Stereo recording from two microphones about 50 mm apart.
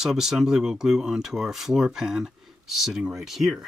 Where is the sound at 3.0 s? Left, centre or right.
Right.